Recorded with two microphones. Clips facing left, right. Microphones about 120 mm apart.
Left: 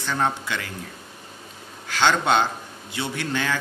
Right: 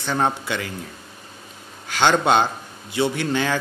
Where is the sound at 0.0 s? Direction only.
25° right (ahead or behind).